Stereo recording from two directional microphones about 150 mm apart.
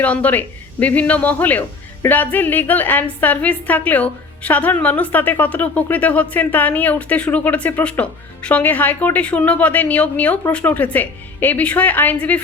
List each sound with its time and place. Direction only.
0.0 s a woman's voice: 10° left (ahead or behind)